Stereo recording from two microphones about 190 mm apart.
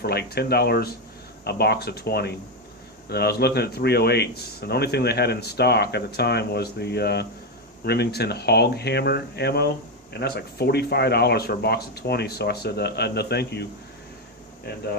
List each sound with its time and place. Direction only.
0.0 s speech: 55° left (ahead or behind)